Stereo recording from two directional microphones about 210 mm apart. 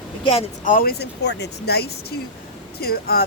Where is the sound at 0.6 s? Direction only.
45° left (ahead or behind).